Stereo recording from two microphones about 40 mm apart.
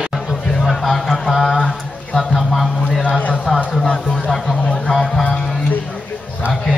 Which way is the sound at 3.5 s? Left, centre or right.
Left.